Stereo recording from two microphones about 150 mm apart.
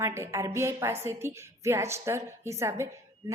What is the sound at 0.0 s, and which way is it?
A woman's voice, 20° right (ahead or behind).